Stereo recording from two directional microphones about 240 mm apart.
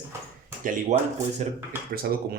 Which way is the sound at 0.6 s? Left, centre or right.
Right.